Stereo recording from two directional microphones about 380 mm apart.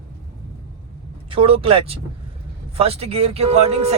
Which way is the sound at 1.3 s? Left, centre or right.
Centre.